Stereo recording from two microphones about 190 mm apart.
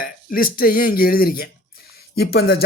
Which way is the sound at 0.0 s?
50° left (ahead or behind).